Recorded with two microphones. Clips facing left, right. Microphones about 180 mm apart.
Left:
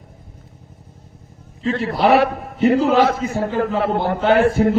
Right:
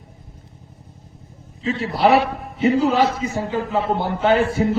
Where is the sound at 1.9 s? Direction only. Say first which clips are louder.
Left 1 dB; 55° left (ahead or behind).